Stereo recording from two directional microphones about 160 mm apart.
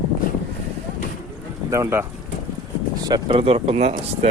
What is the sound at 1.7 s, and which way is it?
Speech, 15° right (ahead or behind).